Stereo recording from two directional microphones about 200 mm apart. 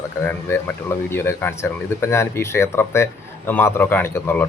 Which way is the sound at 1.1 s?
10° left (ahead or behind).